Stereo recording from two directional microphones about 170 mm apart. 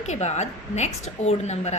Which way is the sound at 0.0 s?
40° left (ahead or behind).